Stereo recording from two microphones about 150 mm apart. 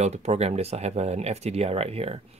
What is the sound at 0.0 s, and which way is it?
Speech, 50° right (ahead or behind).